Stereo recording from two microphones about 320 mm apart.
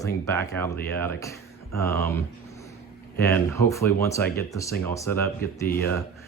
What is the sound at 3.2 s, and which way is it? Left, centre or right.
Speech, centre.